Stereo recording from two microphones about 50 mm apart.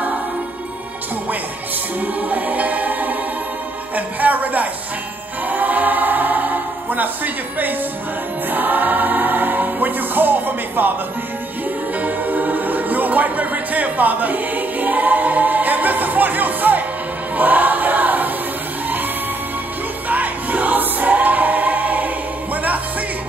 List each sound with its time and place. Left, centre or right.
2.0 s music: right
5.5 s choir: right
8.5 s music: right
12.0 s music: right
17.4 s choir: right
20.1 s choir: right